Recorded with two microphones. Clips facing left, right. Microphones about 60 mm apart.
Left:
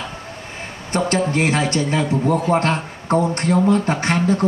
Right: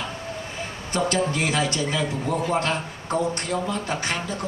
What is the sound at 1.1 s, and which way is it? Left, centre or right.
A man's voice, left.